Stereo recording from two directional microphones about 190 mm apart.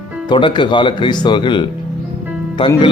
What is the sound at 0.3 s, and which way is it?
Speech, 25° left (ahead or behind).